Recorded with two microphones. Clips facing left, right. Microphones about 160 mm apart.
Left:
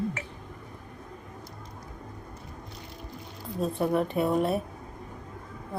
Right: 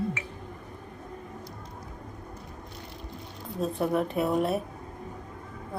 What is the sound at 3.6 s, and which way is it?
A woman's voice, centre (ahead or behind).